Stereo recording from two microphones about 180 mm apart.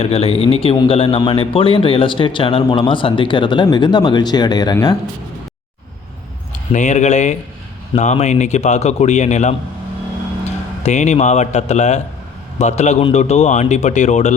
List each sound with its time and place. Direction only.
0.0 s a man's voice: 35° left (ahead or behind)
6.5 s a man's voice: 45° left (ahead or behind)
10.8 s a man's voice: 40° left (ahead or behind)